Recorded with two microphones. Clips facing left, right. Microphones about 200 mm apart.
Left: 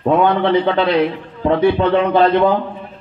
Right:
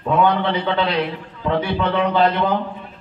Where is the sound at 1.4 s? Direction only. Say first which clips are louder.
Left 7 dB; 40° left (ahead or behind).